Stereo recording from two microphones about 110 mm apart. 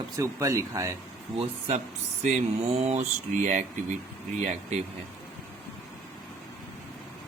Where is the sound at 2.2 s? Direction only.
80° right.